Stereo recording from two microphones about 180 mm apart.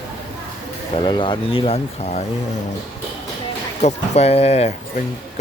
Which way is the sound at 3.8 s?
35° left (ahead or behind).